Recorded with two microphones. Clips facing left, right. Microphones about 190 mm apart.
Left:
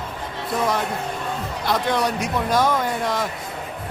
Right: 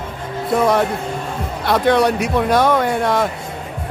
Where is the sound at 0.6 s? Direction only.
65° right (ahead or behind).